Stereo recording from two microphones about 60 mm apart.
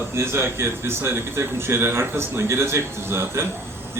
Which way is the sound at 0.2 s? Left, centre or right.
Right.